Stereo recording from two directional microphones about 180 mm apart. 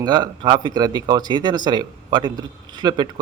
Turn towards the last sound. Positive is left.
turn(degrees=-25)  # may be behind; listen again after turning